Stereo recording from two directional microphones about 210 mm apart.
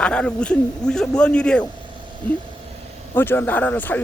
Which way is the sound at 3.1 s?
10° left (ahead or behind).